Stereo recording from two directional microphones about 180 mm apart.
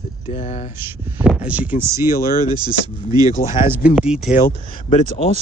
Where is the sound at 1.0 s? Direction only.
5° right (ahead or behind).